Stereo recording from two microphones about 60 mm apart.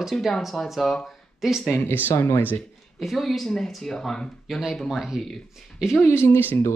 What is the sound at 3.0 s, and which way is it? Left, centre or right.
Speech, centre.